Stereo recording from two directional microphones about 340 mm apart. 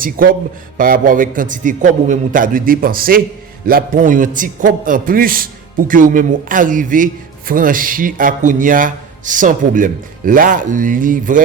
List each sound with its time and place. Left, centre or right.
0.0 s a man's voice: right